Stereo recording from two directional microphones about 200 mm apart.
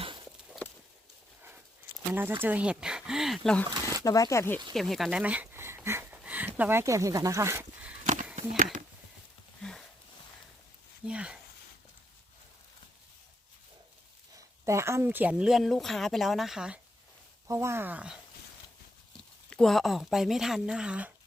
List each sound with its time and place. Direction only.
0.0 s a sound: 25° right (ahead or behind)
2.1 s speech: 10° right (ahead or behind)
3.8 s zipper: 20° right (ahead or behind)
4.0 s speech: 15° left (ahead or behind)
4.7 s speech: centre (ahead or behind)
8.4 s speech: 40° right (ahead or behind)
9.6 s a sound: 5° left (ahead or behind)
11.0 s speech: 5° right (ahead or behind)
14.3 s speech: 15° right (ahead or behind)
19.5 s speech: 5° left (ahead or behind)